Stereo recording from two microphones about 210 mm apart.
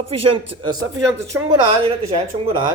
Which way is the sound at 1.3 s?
10° right (ahead or behind).